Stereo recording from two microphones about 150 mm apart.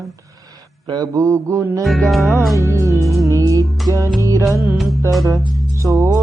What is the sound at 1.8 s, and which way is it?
Music, centre (ahead or behind).